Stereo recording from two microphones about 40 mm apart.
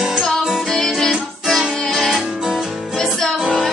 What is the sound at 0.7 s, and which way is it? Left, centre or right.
Music, centre.